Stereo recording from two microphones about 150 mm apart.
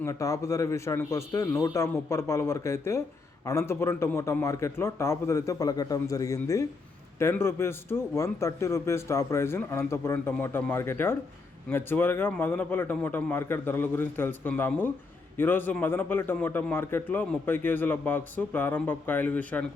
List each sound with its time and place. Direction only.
0.0 s a man's voice: 20° left (ahead or behind)